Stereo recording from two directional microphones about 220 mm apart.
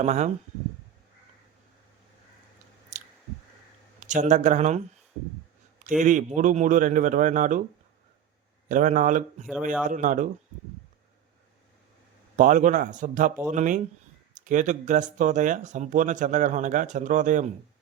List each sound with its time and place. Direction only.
0.0 s speech: 30° right (ahead or behind)
4.0 s speech: 35° right (ahead or behind)
6.0 s speech: 35° right (ahead or behind)
8.7 s speech: 35° right (ahead or behind)
12.4 s speech: 35° right (ahead or behind)